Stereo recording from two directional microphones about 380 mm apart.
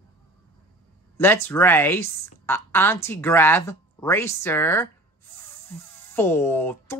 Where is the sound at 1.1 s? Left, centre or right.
Centre.